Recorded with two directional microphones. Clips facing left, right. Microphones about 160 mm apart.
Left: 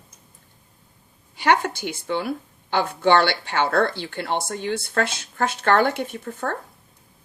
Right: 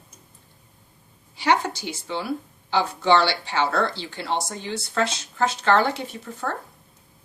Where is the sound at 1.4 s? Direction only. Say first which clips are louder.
Left 2 dB; 55° left (ahead or behind).